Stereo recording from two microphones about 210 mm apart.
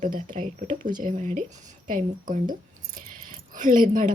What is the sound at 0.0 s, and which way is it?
Speech, 35° right (ahead or behind).